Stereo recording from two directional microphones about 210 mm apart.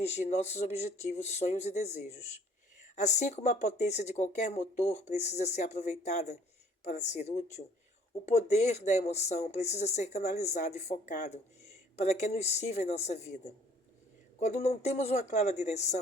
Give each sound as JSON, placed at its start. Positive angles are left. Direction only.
{"t": 0.0, "sound": "speech", "side_deg": 30}
{"t": 14.3, "sound": "speech", "side_deg": 30}